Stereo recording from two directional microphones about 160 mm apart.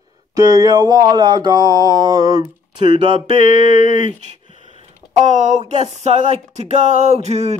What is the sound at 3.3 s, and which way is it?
Mantra, 50° left (ahead or behind).